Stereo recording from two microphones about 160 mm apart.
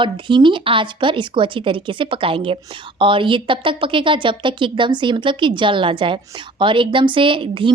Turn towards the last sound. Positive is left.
turn(degrees=-30)  # may be behind; listen again after turning